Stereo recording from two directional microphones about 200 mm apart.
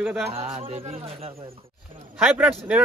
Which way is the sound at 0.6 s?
30° right (ahead or behind).